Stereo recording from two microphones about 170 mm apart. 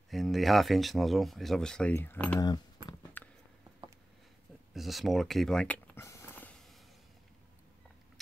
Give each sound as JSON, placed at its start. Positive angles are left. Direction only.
{"t": 0.1, "sound": "speech", "side_deg": 0}
{"t": 2.4, "sound": "a sound", "side_deg": 25}
{"t": 4.7, "sound": "speech", "side_deg": 0}